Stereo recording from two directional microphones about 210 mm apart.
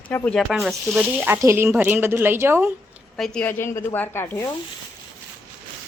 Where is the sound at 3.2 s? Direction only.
5° left (ahead or behind).